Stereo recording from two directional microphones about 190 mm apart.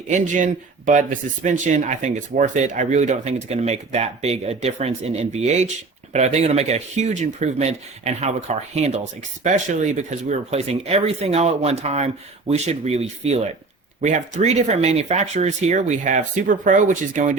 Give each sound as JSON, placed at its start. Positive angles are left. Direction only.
{"t": 0.1, "sound": "speech", "side_deg": -40}